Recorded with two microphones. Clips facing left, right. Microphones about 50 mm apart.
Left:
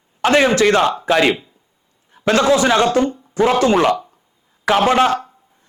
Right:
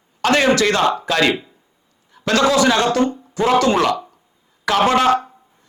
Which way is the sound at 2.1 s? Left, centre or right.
Left.